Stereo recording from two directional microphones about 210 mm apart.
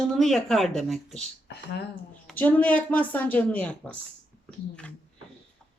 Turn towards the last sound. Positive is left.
turn(degrees=5)  # may be behind; listen again after turning